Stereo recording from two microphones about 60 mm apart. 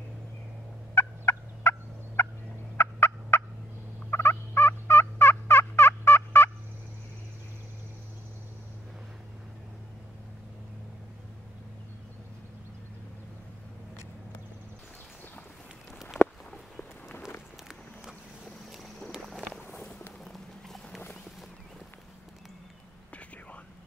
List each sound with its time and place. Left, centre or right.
0.9 s fowl: left
16.1 s walk: left
17.6 s vehicle: centre
19.2 s a sound: centre
20.2 s run: centre